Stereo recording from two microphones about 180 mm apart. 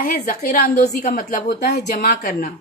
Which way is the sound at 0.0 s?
50° left (ahead or behind).